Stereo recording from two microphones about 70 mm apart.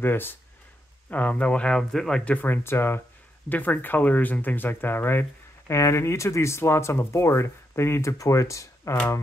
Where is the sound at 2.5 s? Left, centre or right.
Left.